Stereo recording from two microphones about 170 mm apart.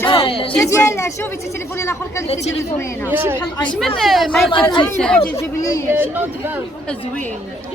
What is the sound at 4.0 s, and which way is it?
Speech, centre (ahead or behind).